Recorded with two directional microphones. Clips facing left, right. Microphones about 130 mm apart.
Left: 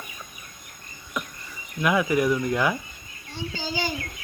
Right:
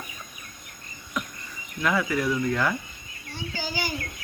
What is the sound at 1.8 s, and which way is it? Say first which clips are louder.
Speech: left 3 dB; 15° left (ahead or behind).